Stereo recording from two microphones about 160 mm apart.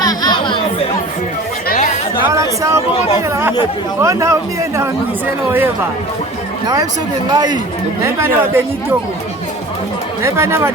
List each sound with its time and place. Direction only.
0.0 s chatter: 25° left (ahead or behind)
1.6 s chatter: 55° left (ahead or behind)
2.3 s a man's voice: 20° right (ahead or behind)
5.5 s speech: 15° right (ahead or behind)
7.3 s a man's voice: 25° right (ahead or behind)
8.0 s speech: 15° right (ahead or behind)
10.2 s speech: 15° right (ahead or behind)